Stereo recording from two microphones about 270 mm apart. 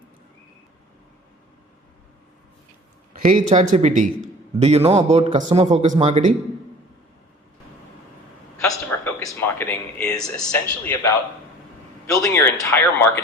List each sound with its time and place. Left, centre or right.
3.2 s a man's voice: right
8.6 s speech: centre